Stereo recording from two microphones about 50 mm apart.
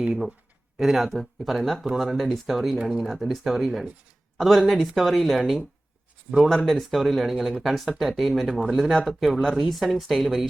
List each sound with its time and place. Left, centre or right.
0.1 s speech: centre
8.6 s speech: right
9.0 s speech: centre